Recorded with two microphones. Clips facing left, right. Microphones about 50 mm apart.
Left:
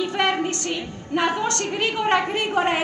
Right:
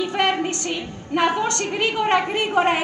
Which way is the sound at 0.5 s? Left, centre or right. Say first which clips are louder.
Right 1 dB; right.